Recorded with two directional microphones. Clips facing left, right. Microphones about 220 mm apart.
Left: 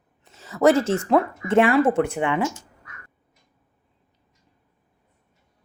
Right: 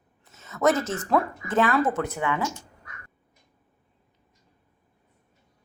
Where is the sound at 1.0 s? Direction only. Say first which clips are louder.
Left 5 dB; 25° left (ahead or behind).